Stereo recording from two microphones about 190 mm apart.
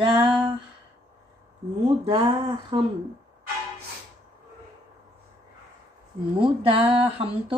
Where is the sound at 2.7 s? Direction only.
30° right (ahead or behind).